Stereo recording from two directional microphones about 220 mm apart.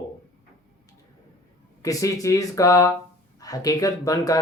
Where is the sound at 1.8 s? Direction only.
15° left (ahead or behind).